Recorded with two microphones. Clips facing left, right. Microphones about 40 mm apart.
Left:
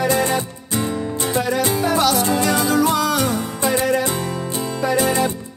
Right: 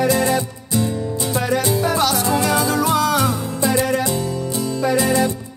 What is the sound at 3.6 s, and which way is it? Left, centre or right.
Music, left.